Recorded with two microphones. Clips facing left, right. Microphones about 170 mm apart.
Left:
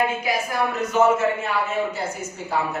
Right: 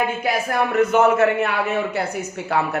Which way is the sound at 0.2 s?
55° right (ahead or behind).